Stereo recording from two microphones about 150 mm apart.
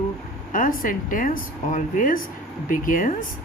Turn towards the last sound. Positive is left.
turn(degrees=65)  # may be behind; listen again after turning